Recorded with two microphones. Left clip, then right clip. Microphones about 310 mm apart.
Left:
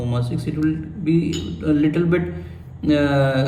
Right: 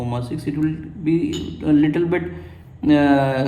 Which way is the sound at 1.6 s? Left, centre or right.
Centre.